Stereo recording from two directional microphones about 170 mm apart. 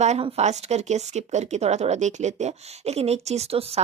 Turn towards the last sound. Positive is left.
turn(degrees=-35)  # may be behind; listen again after turning